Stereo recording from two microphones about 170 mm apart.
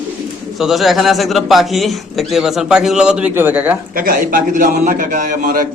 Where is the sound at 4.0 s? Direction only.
55° right (ahead or behind).